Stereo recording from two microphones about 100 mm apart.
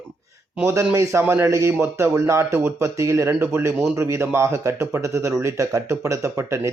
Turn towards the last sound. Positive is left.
turn(degrees=-30)  # may be behind; listen again after turning